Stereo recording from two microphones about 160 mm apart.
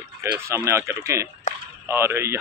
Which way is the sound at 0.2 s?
15° right (ahead or behind).